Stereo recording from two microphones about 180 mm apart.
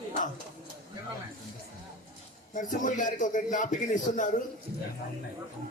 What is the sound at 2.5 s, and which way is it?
A man's voice, 45° left (ahead or behind).